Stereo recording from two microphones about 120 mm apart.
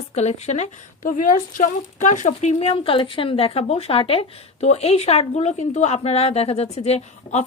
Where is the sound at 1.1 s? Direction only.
90° left.